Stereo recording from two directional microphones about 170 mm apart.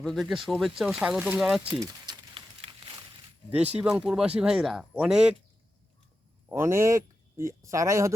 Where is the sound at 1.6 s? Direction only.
30° right (ahead or behind).